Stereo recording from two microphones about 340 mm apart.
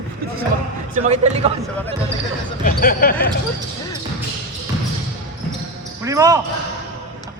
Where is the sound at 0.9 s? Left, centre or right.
Centre.